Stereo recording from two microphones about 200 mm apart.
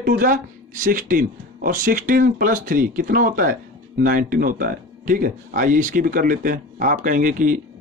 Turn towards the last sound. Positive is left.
turn(degrees=-40)  # may be behind; listen again after turning